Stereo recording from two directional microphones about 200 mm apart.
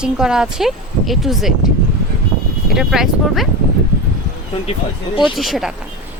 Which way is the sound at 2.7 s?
Centre (ahead or behind).